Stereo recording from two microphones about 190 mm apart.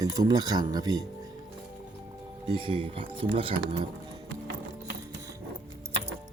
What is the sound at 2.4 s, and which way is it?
Speech, 25° right (ahead or behind).